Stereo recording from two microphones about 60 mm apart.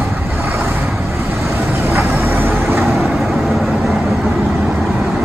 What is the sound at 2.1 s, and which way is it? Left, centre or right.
Vehicle, right.